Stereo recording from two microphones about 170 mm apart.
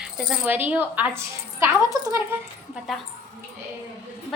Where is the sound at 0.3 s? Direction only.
10° right (ahead or behind).